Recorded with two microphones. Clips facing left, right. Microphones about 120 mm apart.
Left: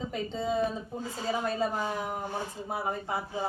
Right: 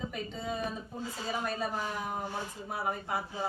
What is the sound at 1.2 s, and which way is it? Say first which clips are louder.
A woman's voice: left 5 dB; 25° left (ahead or behind).